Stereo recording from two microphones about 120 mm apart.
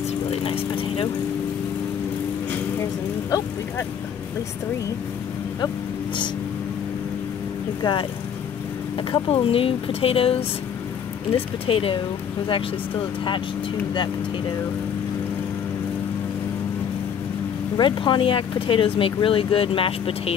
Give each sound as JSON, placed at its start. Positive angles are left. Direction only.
{"t": 0.3, "sound": "vehicle", "side_deg": 50}
{"t": 3.3, "sound": "speech", "side_deg": 30}
{"t": 7.8, "sound": "speech", "side_deg": 40}
{"t": 11.6, "sound": "speech", "side_deg": 50}
{"t": 17.7, "sound": "speech", "side_deg": 40}